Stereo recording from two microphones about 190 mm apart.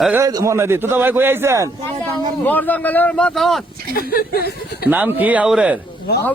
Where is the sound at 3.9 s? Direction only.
50° left (ahead or behind).